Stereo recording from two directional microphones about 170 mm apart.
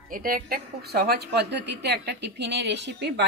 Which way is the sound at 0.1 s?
55° right (ahead or behind).